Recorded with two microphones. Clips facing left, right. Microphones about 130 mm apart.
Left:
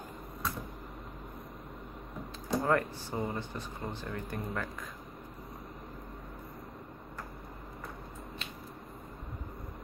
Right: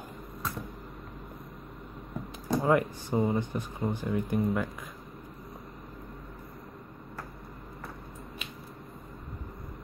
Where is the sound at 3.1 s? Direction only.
25° right (ahead or behind).